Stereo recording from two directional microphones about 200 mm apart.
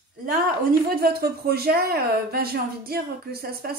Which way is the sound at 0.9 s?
50° right (ahead or behind).